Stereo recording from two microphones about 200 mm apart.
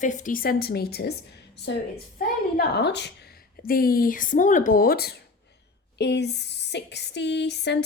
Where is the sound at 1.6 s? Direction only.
55° left (ahead or behind).